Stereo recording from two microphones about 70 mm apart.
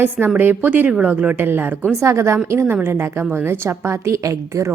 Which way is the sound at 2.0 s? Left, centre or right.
Right.